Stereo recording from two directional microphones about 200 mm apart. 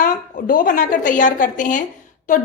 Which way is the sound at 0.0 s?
45° left (ahead or behind).